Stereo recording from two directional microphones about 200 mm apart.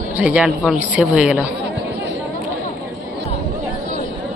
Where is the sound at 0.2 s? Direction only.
5° right (ahead or behind).